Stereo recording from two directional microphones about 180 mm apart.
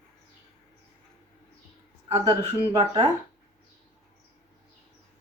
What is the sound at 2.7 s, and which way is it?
Speech, 25° right (ahead or behind).